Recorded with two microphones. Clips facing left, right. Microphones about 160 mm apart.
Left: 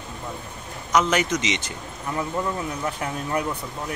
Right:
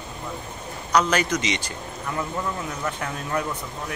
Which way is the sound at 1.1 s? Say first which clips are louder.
Even; 20° left (ahead or behind).